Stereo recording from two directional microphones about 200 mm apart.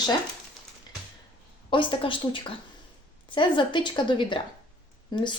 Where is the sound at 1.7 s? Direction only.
25° left (ahead or behind).